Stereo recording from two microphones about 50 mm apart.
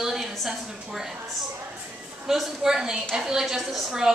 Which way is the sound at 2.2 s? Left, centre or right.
Centre.